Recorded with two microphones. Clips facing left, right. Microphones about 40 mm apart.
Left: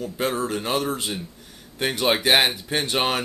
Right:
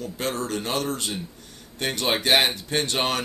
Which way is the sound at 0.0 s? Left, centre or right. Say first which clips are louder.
Left 3 dB; centre.